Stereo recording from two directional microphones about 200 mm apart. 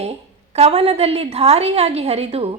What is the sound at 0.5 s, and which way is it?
A woman's voice, 30° right (ahead or behind).